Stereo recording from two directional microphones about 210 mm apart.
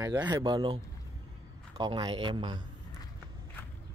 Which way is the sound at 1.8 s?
20° right (ahead or behind).